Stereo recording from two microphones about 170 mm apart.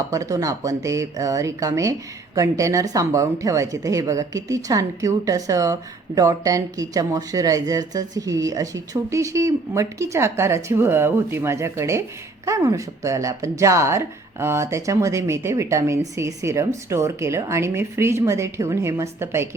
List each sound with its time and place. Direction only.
0.1 s speech: 20° right (ahead or behind)